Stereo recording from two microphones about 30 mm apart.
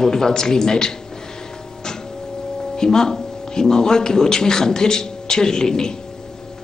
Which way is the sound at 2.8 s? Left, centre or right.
Centre.